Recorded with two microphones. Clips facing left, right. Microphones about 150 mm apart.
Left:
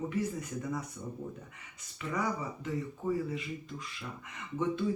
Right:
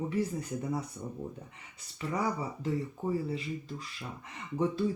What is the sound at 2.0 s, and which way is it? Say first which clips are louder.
Speech: right 2 dB; 35° right (ahead or behind).